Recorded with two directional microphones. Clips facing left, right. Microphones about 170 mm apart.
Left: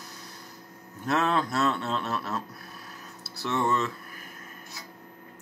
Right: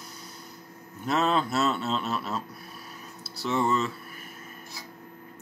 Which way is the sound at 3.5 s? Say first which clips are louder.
Right 1 dB; 5° right (ahead or behind).